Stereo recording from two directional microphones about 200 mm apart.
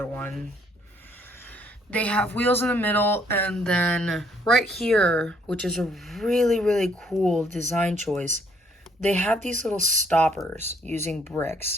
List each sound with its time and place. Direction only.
0.0 s a sound: 10° left (ahead or behind)
1.4 s speech: 10° left (ahead or behind)
8.2 s speech: 35° right (ahead or behind)
9.0 s speech: 5° left (ahead or behind)
9.4 s speech: 35° right (ahead or behind)
10.1 s speech: 5° left (ahead or behind)
10.6 s speech: 35° right (ahead or behind)